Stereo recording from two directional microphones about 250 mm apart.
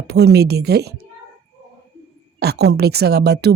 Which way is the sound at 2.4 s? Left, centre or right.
Right.